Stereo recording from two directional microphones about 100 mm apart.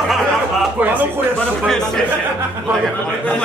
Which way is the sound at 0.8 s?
15° right (ahead or behind).